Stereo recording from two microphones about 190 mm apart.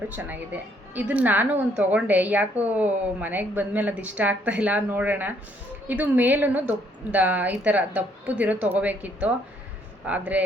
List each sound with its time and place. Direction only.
0.1 s a woman's voice: 10° right (ahead or behind)